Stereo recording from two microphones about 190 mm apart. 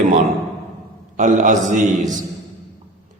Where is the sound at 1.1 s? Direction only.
40° right (ahead or behind).